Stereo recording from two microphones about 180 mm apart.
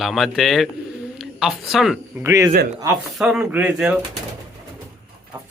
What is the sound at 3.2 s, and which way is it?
Speech, 5° right (ahead or behind).